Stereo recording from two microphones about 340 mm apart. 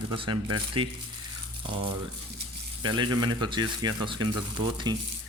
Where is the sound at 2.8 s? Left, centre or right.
Centre.